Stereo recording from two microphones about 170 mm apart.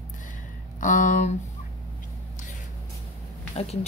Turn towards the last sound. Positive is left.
turn(degrees=40)  # may be behind; listen again after turning